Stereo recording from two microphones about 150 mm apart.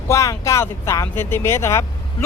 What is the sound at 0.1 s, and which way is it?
Speech, 20° left (ahead or behind).